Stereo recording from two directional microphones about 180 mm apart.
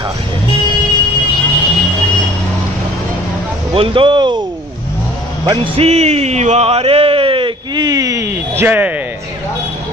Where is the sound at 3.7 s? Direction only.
30° right (ahead or behind).